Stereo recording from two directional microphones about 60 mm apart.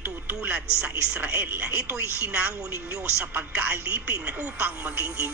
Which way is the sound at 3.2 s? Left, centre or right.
Right.